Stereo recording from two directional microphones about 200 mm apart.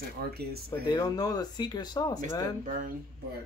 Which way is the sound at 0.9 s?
20° left (ahead or behind).